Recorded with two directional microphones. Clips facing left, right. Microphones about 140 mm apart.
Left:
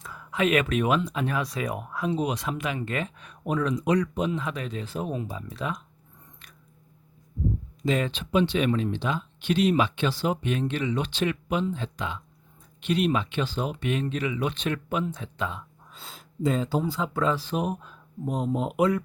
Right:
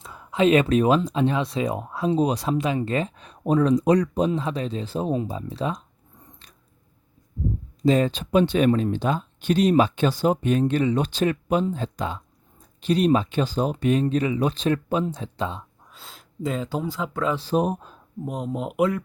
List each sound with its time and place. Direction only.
0.0 s speech: 25° right (ahead or behind)
7.8 s speech: 35° right (ahead or behind)
15.9 s speech: centre (ahead or behind)
17.3 s speech: 35° right (ahead or behind)
18.3 s speech: centre (ahead or behind)